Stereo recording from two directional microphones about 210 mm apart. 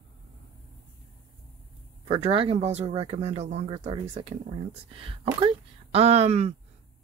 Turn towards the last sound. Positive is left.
turn(degrees=-30)  # may be behind; listen again after turning